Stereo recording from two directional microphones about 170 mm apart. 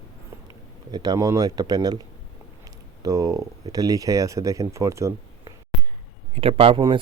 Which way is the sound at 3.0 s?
20° right (ahead or behind).